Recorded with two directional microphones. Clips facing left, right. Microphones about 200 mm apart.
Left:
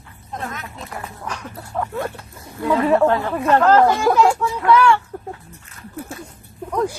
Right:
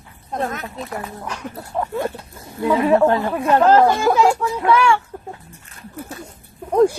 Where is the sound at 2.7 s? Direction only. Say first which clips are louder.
Right 1 dB; 5° right (ahead or behind).